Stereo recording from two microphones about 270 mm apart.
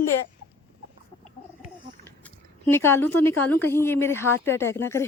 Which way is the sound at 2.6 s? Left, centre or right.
Centre.